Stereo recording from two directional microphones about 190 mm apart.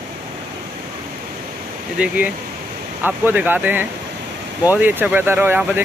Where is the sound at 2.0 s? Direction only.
5° right (ahead or behind).